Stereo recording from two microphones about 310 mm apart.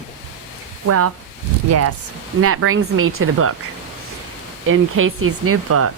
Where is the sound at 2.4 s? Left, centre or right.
Right.